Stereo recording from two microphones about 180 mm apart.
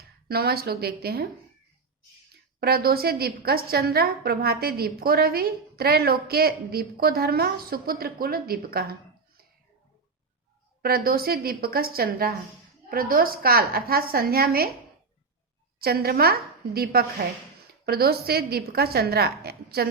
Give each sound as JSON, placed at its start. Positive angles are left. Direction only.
{"t": 0.3, "sound": "a woman's voice", "side_deg": -60}
{"t": 2.6, "sound": "a woman's voice", "side_deg": -60}
{"t": 10.8, "sound": "a woman's voice", "side_deg": -55}
{"t": 15.8, "sound": "a woman's voice", "side_deg": -60}